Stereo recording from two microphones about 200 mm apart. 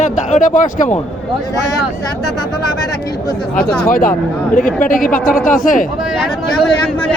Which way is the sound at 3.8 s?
45° left (ahead or behind).